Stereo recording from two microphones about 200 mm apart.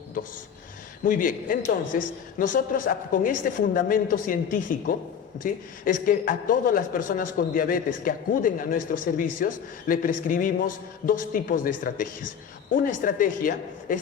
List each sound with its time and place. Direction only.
1.0 s speech: 40° left (ahead or behind)